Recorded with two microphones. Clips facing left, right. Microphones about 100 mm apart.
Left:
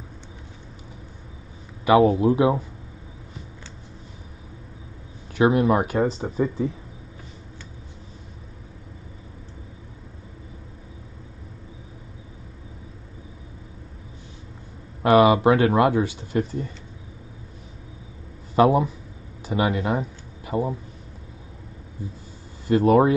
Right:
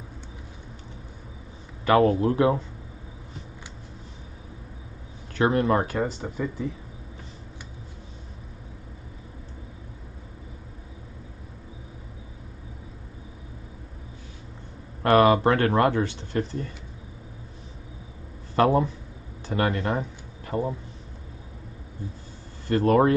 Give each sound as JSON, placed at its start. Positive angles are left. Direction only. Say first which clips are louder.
{"t": 1.9, "sound": "speech", "louder": "left 3 dB", "side_deg": 10}
{"t": 5.4, "sound": "speech", "louder": "left 3 dB", "side_deg": 10}
{"t": 15.0, "sound": "speech", "louder": "left 2 dB", "side_deg": 5}
{"t": 18.5, "sound": "speech", "louder": "left 3 dB", "side_deg": 10}
{"t": 22.7, "sound": "speech", "louder": "left 3 dB", "side_deg": 10}